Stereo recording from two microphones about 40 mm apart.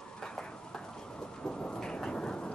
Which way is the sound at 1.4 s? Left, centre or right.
Left.